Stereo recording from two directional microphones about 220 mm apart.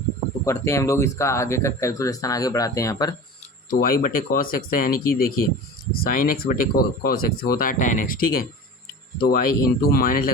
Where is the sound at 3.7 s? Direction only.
40° left (ahead or behind).